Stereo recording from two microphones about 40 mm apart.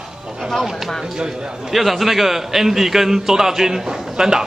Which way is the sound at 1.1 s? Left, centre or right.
Centre.